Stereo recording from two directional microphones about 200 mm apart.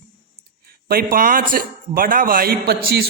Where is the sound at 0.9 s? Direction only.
50° right (ahead or behind).